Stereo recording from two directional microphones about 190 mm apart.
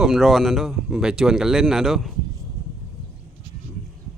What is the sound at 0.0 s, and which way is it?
Speech, centre (ahead or behind).